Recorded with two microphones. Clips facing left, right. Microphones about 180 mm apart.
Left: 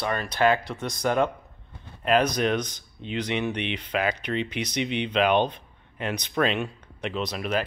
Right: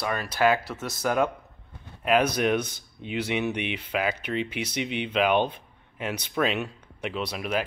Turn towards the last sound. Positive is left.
turn(degrees=-10)  # may be behind; listen again after turning